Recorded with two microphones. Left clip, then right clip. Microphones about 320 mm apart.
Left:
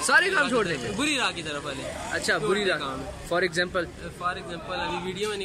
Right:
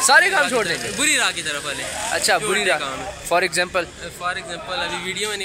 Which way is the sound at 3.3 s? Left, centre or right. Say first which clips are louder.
Right 6 dB; centre.